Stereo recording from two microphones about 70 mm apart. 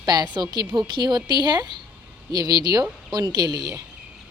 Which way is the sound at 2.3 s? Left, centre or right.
Right.